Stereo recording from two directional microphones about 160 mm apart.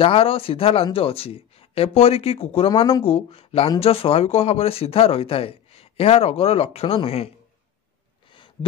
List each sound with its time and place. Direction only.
0.0 s speech: 35° left (ahead or behind)